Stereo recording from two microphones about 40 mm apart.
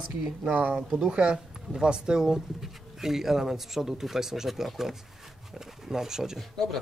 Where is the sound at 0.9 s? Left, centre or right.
Right.